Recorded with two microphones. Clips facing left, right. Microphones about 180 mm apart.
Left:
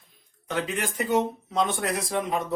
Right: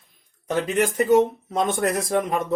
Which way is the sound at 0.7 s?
45° right (ahead or behind).